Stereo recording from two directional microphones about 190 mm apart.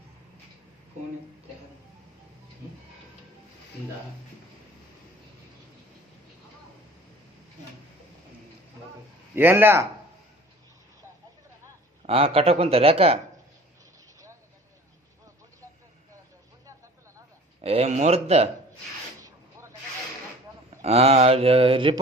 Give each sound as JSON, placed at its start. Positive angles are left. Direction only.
{"t": 9.3, "sound": "speech", "side_deg": -10}
{"t": 12.0, "sound": "mantra", "side_deg": -30}
{"t": 17.6, "sound": "mantra", "side_deg": -35}
{"t": 19.2, "sound": "a sound", "side_deg": -15}
{"t": 20.8, "sound": "mantra", "side_deg": -35}